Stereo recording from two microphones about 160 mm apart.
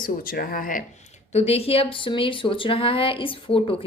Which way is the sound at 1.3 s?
40° left (ahead or behind).